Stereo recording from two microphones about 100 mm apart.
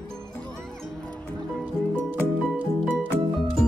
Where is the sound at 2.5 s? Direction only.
15° right (ahead or behind).